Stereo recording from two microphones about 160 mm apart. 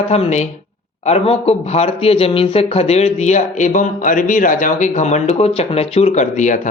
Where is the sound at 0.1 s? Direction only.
45° left (ahead or behind).